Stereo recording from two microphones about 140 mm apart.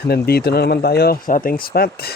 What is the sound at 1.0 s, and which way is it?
A man's voice, 90° left.